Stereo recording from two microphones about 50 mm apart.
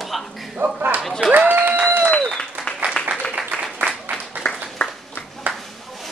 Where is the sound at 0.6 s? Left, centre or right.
Right.